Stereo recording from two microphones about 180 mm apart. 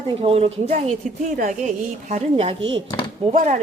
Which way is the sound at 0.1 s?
30° right (ahead or behind).